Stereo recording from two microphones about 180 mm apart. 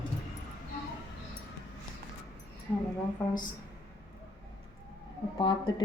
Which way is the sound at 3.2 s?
5° left (ahead or behind).